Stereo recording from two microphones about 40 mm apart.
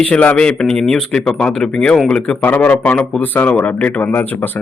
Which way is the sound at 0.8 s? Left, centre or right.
Centre.